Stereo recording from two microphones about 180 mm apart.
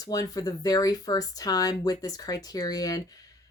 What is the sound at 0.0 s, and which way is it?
Speech, 20° left (ahead or behind).